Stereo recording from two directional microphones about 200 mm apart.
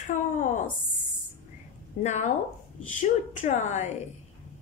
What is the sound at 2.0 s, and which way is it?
A woman's voice, 35° left (ahead or behind).